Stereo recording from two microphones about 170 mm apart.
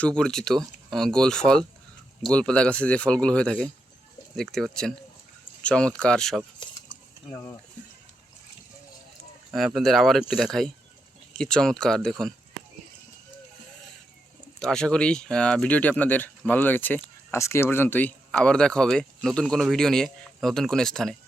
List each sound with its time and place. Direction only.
0.0 s speech: 5° left (ahead or behind)
7.3 s speech: 15° left (ahead or behind)
9.5 s speech: centre (ahead or behind)
14.6 s speech: 5° left (ahead or behind)